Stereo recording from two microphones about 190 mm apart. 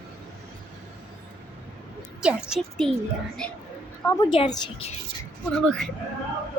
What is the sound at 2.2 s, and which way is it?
Speech, centre (ahead or behind).